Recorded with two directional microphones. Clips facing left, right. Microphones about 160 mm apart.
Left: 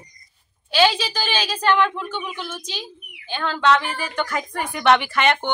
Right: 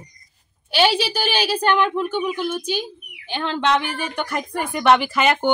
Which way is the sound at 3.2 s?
20° right (ahead or behind).